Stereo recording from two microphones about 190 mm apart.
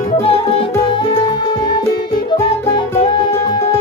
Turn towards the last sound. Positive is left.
turn(degrees=25)  # may be behind; listen again after turning